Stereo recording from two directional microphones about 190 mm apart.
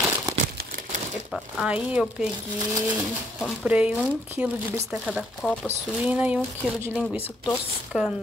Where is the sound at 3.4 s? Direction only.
5° right (ahead or behind).